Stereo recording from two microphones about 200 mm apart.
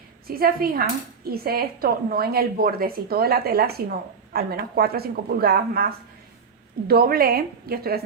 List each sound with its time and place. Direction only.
0.3 s a woman's voice: 50° right (ahead or behind)